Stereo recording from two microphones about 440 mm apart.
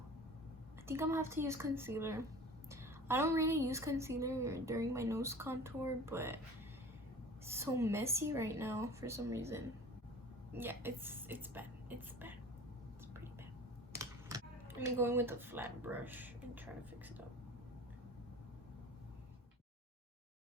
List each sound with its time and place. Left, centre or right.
0.9 s a woman's voice: centre
7.4 s a woman's voice: centre
14.0 s speech: centre